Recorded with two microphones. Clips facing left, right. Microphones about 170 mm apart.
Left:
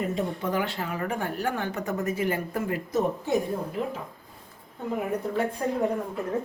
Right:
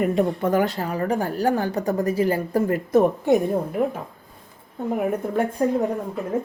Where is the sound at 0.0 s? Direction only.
60° right (ahead or behind).